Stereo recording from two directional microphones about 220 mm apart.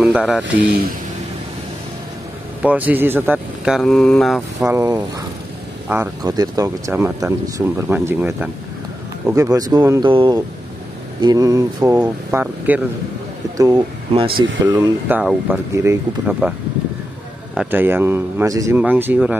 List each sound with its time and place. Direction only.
0.0 s a sound: 5° right (ahead or behind)
2.6 s speech: 5° right (ahead or behind)
4.6 s speech: 15° right (ahead or behind)
13.6 s speech: 20° right (ahead or behind)
17.6 s speech: 10° right (ahead or behind)